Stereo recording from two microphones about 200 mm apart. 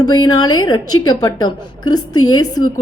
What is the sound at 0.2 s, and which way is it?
Speech, 90° left.